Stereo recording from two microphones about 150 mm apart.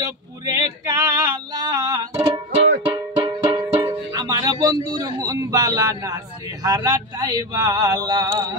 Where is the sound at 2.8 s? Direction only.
35° right (ahead or behind).